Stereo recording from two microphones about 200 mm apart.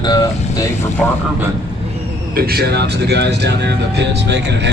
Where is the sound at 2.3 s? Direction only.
50° right (ahead or behind).